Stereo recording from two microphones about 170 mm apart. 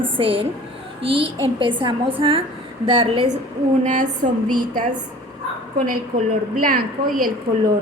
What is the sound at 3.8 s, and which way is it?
Speech, 50° right (ahead or behind).